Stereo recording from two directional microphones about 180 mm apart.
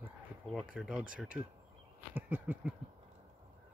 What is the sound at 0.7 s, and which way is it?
Speech, 5° right (ahead or behind).